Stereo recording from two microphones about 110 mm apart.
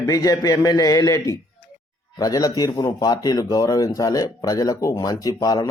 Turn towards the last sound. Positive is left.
turn(degrees=35)  # may be behind; listen again after turning